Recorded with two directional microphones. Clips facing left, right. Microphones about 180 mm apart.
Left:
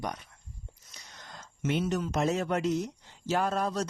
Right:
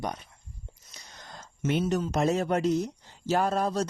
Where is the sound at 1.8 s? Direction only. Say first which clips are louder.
Right 3 dB; 30° right (ahead or behind).